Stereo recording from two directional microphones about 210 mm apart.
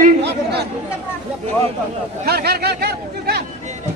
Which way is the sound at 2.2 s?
50° right (ahead or behind).